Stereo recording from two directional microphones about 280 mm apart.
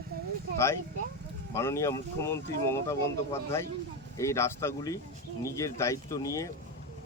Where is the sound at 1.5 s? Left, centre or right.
Centre.